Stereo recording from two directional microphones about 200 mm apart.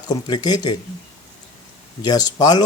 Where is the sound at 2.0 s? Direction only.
20° left (ahead or behind).